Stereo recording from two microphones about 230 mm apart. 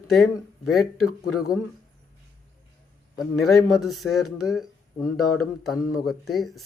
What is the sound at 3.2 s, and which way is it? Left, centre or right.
Speech, centre.